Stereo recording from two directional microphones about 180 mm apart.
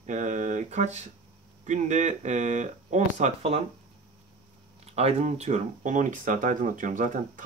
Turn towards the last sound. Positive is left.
turn(degrees=-45)  # may be behind; listen again after turning